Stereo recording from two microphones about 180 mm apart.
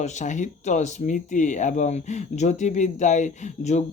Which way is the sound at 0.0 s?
40° left (ahead or behind).